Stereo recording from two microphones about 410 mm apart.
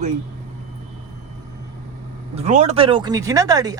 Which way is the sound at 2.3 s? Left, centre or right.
Centre.